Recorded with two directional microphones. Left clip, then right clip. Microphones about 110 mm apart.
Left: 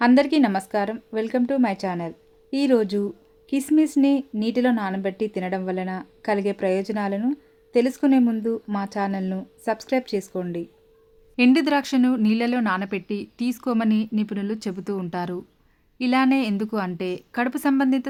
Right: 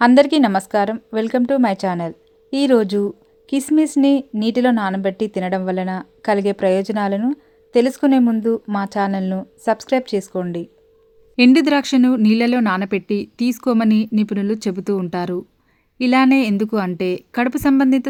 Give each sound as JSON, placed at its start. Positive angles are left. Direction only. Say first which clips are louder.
{"t": 0.0, "sound": "a woman's voice", "louder": "right 6 dB", "side_deg": -50}